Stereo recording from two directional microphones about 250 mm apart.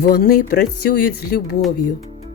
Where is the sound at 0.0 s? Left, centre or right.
Left.